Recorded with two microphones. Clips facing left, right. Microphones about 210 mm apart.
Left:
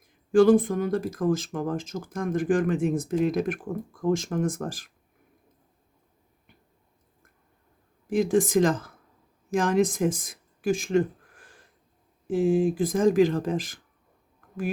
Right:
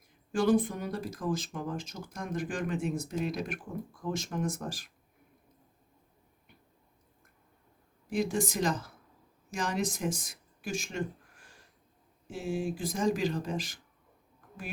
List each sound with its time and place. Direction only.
0.3 s speech: 50° left (ahead or behind)
8.2 s speech: 90° left
8.6 s speech: 50° left (ahead or behind)
12.5 s speech: 50° left (ahead or behind)